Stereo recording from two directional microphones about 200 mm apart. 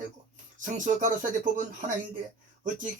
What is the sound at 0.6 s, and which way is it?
Speech, 40° right (ahead or behind).